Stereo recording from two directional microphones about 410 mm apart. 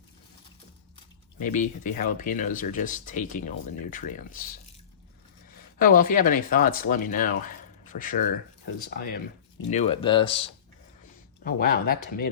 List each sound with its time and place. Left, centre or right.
1.4 s speech: centre
5.8 s speech: centre